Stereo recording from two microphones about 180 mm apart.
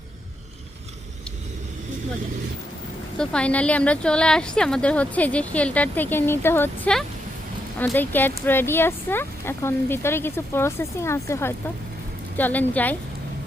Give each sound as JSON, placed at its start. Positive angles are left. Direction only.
{"t": 3.2, "sound": "speech", "side_deg": 5}